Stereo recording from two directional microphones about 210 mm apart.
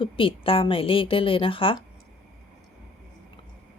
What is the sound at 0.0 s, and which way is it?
Speech, 25° left (ahead or behind).